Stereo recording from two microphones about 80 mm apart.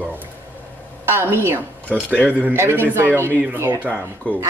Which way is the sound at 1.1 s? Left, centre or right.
Right.